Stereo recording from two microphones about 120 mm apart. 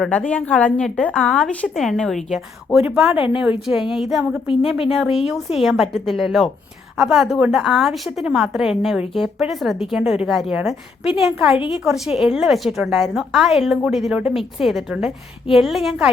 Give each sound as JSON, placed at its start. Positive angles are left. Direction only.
{"t": 0.0, "sound": "a woman's voice", "side_deg": 10}
{"t": 11.5, "sound": "a woman's voice", "side_deg": 45}
{"t": 11.9, "sound": "a woman's voice", "side_deg": -5}